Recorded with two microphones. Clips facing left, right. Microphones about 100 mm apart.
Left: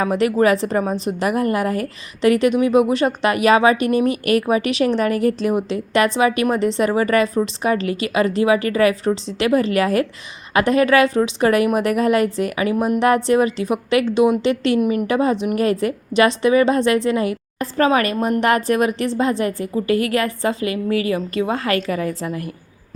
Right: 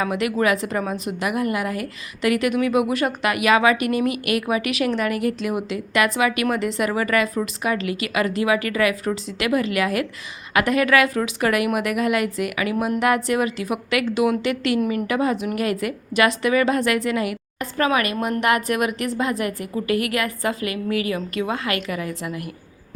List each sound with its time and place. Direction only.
0.0 s a woman's voice: 35° left (ahead or behind)